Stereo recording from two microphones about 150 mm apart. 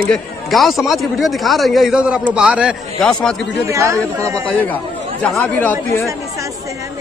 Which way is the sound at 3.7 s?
20° right (ahead or behind).